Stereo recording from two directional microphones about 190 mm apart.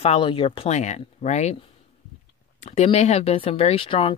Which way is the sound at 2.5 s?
35° left (ahead or behind).